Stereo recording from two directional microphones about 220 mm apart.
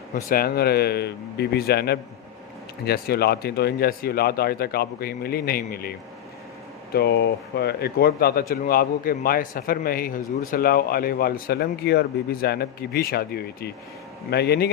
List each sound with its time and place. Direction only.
0.3 s speech: 45° left (ahead or behind)